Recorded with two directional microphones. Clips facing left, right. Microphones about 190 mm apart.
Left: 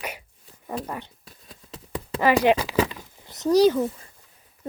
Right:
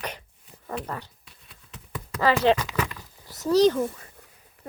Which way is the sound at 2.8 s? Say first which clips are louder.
Left 6 dB; 20° left (ahead or behind).